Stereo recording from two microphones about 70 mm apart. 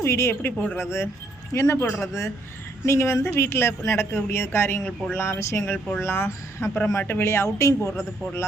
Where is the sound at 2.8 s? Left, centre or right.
Left.